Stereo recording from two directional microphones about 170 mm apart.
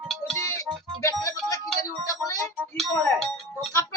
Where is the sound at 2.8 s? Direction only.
Centre (ahead or behind).